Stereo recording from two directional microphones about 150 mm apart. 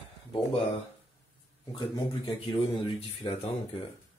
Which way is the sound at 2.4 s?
35° left (ahead or behind).